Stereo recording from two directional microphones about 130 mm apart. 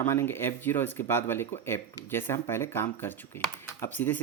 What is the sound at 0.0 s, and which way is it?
Speech, 20° left (ahead or behind).